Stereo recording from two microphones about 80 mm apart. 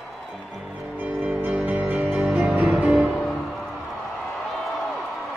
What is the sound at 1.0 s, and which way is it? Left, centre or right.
Music, right.